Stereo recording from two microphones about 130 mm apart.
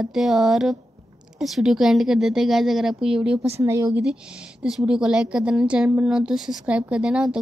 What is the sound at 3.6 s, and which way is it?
Speech, 25° right (ahead or behind).